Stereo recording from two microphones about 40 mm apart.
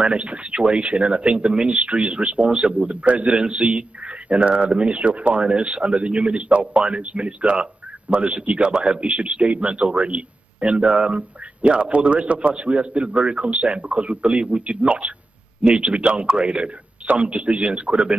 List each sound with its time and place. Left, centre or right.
0.0 s speech: right